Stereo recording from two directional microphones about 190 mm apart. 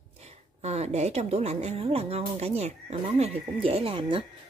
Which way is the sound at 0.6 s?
35° right (ahead or behind).